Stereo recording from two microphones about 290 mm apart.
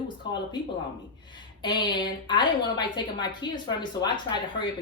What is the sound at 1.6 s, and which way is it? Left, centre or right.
A woman's voice, centre.